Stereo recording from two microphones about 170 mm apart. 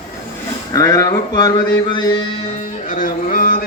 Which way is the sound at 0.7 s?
20° left (ahead or behind).